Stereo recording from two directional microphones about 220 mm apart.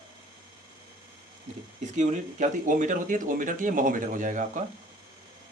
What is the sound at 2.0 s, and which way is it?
Speech, 35° right (ahead or behind).